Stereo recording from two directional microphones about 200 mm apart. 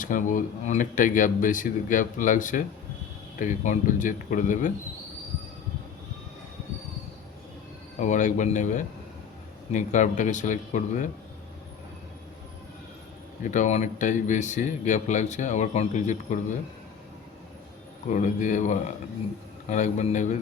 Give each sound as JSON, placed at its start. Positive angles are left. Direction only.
{"t": 0.0, "sound": "speech", "side_deg": 40}
{"t": 7.9, "sound": "speech", "side_deg": 35}
{"t": 13.4, "sound": "speech", "side_deg": 40}
{"t": 18.1, "sound": "speech", "side_deg": 40}